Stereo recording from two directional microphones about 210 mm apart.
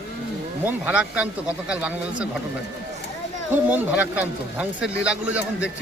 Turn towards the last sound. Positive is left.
turn(degrees=-5)  # may be behind; listen again after turning